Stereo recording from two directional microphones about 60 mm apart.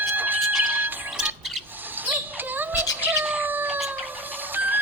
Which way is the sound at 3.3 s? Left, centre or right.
Right.